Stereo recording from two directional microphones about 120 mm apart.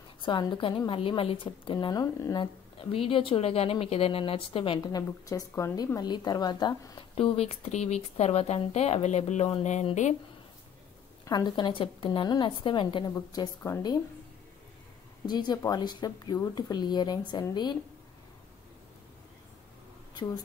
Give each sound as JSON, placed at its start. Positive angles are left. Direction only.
{"t": 0.2, "sound": "a woman's voice", "side_deg": 40}
{"t": 4.9, "sound": "speech", "side_deg": 25}
{"t": 7.2, "sound": "speech", "side_deg": 55}
{"t": 11.2, "sound": "speech", "side_deg": 35}
{"t": 13.1, "sound": "speech", "side_deg": 30}
{"t": 15.2, "sound": "speech", "side_deg": 35}